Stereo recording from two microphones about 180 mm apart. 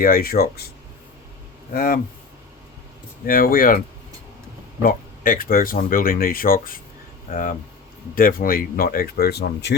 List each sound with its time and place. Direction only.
0.0 s speech: 55° left (ahead or behind)
1.7 s speech: 55° left (ahead or behind)
3.2 s speech: 55° left (ahead or behind)
4.8 s speech: 50° left (ahead or behind)
8.1 s speech: 55° left (ahead or behind); by 9.7 s 70° left (ahead or behind)